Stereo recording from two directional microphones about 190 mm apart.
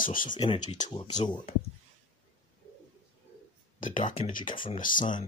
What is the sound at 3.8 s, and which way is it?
Speech, 45° left (ahead or behind).